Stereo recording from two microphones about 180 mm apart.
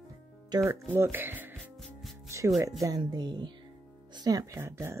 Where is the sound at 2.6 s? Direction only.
20° right (ahead or behind).